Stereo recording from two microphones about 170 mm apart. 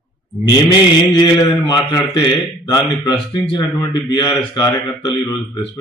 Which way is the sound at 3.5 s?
25° left (ahead or behind).